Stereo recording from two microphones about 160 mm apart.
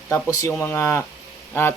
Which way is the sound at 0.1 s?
20° left (ahead or behind).